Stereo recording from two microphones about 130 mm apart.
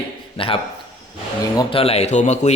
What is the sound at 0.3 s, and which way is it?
Speech, 45° left (ahead or behind).